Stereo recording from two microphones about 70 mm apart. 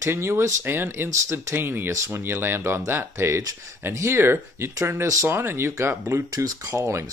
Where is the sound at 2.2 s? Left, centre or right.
Right.